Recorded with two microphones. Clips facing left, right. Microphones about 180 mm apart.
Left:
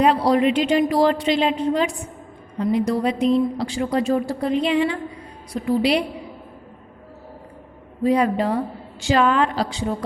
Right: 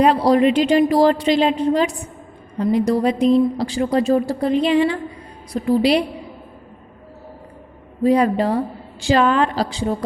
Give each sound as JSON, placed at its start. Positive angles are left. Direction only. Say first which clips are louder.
{"t": 0.0, "sound": "speech", "louder": "right 3 dB", "side_deg": -40}
{"t": 8.0, "sound": "speech", "louder": "right 3 dB", "side_deg": -35}